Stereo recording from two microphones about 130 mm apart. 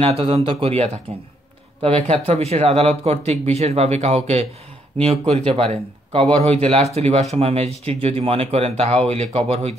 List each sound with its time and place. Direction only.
0.2 s speech: 45° right (ahead or behind)